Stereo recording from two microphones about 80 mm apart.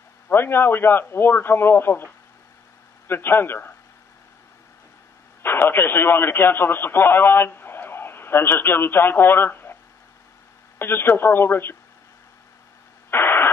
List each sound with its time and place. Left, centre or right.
0.3 s a man's voice: left
3.1 s a man's voice: left
5.4 s a man's voice: left
10.8 s a man's voice: left
13.1 s radio: left